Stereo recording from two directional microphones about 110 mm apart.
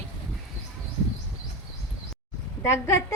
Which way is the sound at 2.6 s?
25° left (ahead or behind).